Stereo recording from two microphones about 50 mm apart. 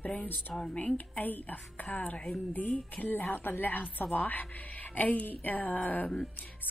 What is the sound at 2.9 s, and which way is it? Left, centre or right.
A woman's voice, left.